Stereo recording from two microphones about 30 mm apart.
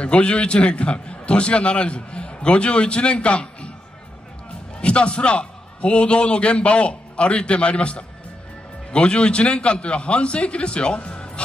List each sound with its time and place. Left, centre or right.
0.0 s a man's voice: left
4.8 s a man's voice: left